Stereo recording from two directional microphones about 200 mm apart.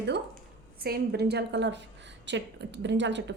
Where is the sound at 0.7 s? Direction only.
50° right (ahead or behind).